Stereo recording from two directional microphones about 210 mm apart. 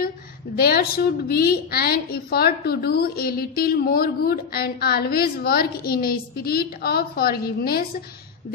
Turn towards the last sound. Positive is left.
turn(degrees=45)  # may be behind; listen again after turning